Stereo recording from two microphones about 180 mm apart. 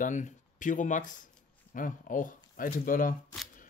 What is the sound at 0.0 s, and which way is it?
Speech, 45° left (ahead or behind).